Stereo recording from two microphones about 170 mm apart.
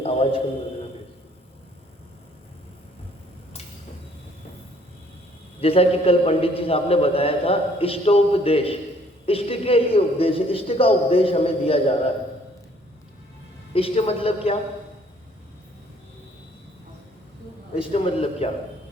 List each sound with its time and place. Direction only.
0.0 s a sound: 35° left (ahead or behind)
5.5 s a man's voice: 35° left (ahead or behind)
13.7 s a man's voice: 35° left (ahead or behind)
17.9 s a man's voice: 35° left (ahead or behind)